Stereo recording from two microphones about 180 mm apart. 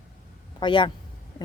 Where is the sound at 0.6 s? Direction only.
25° left (ahead or behind).